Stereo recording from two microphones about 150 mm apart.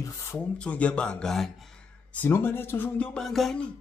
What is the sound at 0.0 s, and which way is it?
Speech, 20° left (ahead or behind).